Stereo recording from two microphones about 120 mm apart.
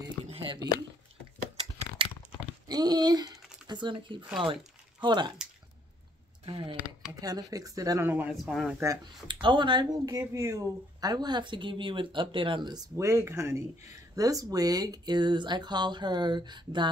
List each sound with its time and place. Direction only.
0.2 s a sound: 55° right (ahead or behind)
2.0 s crunch: 45° right (ahead or behind)
2.7 s speech: 35° right (ahead or behind)
6.4 s speech: 45° right (ahead or behind)
7.2 s speech: 30° right (ahead or behind)
8.0 s speech: 15° right (ahead or behind)
8.3 s speech: centre (ahead or behind)
8.7 s speech: 25° right (ahead or behind)
9.3 s speech: 40° right (ahead or behind)